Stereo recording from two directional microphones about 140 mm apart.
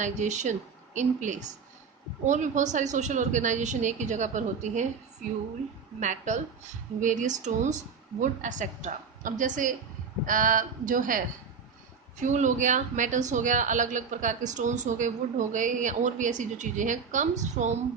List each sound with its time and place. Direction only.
0.0 s a woman's voice: 60° right (ahead or behind)
6.0 s a woman's voice: 60° right (ahead or behind)
12.1 s a woman's voice: 60° right (ahead or behind)